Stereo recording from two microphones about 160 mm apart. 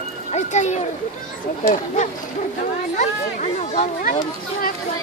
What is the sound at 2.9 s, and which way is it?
Speech, 50° left (ahead or behind).